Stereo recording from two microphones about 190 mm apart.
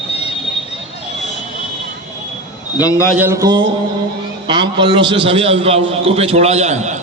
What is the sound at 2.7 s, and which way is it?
Speech, 20° left (ahead or behind).